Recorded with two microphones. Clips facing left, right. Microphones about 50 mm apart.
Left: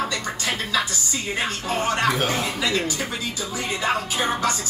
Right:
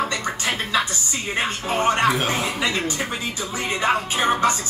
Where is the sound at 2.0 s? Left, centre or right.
Centre.